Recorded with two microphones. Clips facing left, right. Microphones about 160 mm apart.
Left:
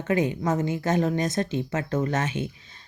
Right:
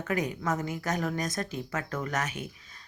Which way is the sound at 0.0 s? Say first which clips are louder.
Left 6 dB; 25° left (ahead or behind).